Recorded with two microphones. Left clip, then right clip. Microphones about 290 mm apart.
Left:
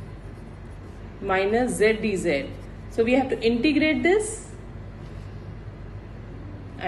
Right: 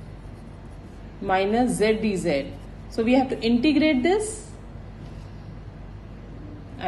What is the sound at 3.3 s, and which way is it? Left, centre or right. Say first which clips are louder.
Speech: even; right.